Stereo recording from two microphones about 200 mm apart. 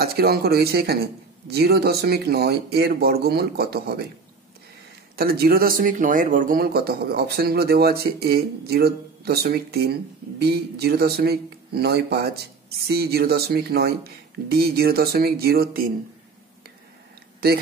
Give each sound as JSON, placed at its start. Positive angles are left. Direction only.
{"t": 0.0, "sound": "speech", "side_deg": -50}
{"t": 5.1, "sound": "speech", "side_deg": -50}
{"t": 17.4, "sound": "speech", "side_deg": -50}